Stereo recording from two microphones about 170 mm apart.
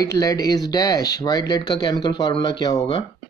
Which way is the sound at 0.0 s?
20° left (ahead or behind).